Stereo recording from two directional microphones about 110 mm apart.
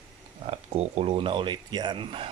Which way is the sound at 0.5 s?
75° right (ahead or behind).